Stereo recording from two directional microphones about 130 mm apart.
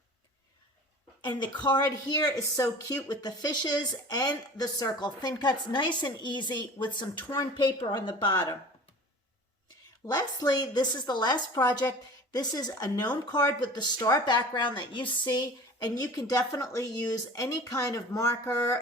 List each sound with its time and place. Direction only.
1.2 s a woman's voice: 35° left (ahead or behind)
10.1 s a woman's voice: 30° left (ahead or behind)